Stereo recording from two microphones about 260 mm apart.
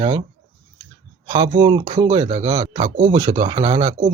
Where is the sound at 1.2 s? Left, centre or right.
Centre.